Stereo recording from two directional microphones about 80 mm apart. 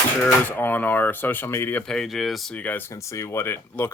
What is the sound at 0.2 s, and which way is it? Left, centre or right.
Speech, left.